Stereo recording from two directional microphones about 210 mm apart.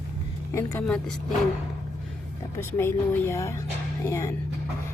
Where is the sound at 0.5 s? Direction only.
10° left (ahead or behind).